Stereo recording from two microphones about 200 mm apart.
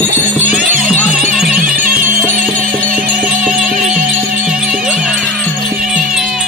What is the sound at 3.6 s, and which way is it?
Music, 40° right (ahead or behind).